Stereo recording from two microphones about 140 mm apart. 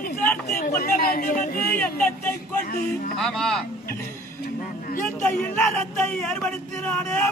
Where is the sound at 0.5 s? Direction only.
60° left (ahead or behind); by 1.6 s 80° left.